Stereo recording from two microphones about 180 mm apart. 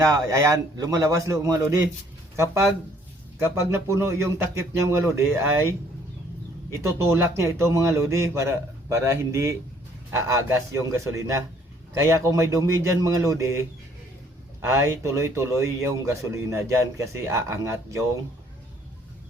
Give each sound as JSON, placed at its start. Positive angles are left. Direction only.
{"t": 0.3, "sound": "speech", "side_deg": -15}
{"t": 6.7, "sound": "speech", "side_deg": -15}
{"t": 14.7, "sound": "speech", "side_deg": -15}